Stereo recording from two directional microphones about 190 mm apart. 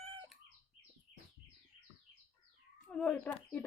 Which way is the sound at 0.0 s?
30° right (ahead or behind).